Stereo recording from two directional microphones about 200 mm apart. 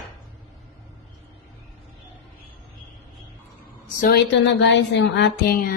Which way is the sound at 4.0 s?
55° left (ahead or behind).